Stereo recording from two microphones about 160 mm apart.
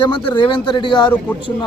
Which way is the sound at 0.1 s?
30° left (ahead or behind).